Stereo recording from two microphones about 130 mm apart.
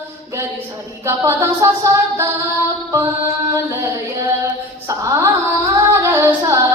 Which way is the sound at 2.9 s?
25° right (ahead or behind).